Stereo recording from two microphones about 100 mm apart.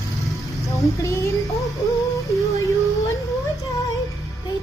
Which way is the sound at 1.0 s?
30° left (ahead or behind).